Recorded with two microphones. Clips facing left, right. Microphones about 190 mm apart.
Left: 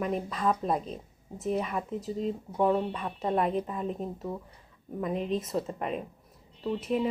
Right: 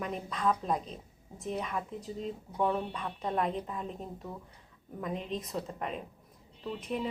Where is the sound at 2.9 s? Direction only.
10° left (ahead or behind).